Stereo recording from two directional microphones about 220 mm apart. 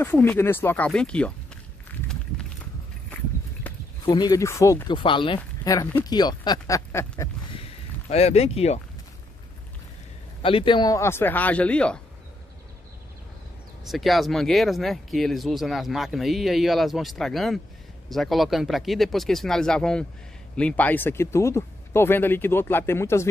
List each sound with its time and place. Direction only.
0.0 s speech: 10° left (ahead or behind)
4.0 s speech: 20° left (ahead or behind)
7.5 s a sound: 25° left (ahead or behind)
10.4 s speech: 25° left (ahead or behind); by 12.0 s 5° left (ahead or behind)
13.8 s speech: centre (ahead or behind)